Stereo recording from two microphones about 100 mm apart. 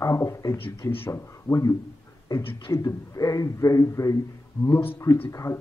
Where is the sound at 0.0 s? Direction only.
30° left (ahead or behind).